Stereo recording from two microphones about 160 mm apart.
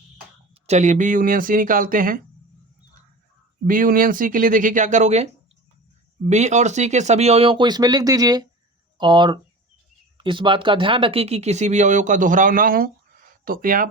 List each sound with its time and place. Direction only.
0.7 s speech: 50° right (ahead or behind)
3.7 s speech: 60° right (ahead or behind)